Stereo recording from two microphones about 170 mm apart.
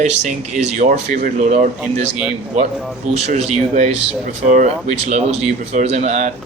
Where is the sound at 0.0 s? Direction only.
45° right (ahead or behind).